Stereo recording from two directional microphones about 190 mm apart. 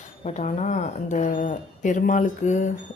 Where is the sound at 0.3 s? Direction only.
40° left (ahead or behind).